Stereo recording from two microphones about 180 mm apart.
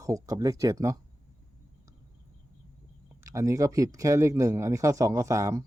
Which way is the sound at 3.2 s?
15° right (ahead or behind).